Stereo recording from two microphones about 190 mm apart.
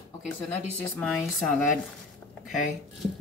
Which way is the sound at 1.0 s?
Centre (ahead or behind).